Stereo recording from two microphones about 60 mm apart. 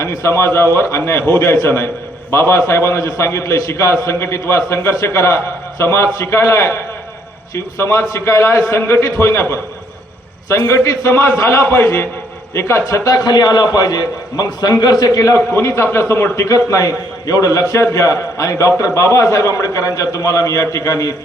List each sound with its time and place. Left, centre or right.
0.3 s a man's voice: left
10.8 s a man's voice: left
11.6 s a man's voice: left
12.9 s a man's voice: left
15.5 s a man's voice: left
17.2 s a man's voice: left
17.7 s a man's voice: left